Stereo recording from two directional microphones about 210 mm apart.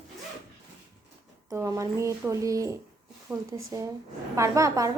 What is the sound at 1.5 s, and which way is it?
A woman's voice, 15° right (ahead or behind).